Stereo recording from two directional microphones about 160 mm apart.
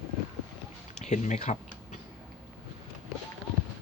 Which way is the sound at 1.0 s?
45° left (ahead or behind).